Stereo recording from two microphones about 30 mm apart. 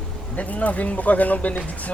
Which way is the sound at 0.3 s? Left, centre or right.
Left.